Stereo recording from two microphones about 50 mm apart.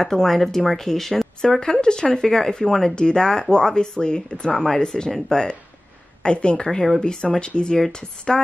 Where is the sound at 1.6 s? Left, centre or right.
Centre.